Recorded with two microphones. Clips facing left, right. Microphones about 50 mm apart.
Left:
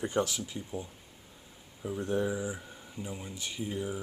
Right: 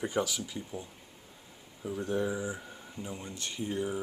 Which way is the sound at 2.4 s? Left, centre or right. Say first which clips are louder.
Even; centre.